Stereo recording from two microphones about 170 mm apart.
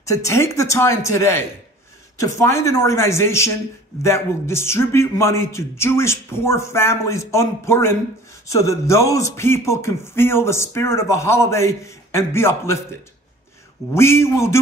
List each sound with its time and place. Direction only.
0.0 s speech: 15° left (ahead or behind)
13.9 s speech: 15° left (ahead or behind)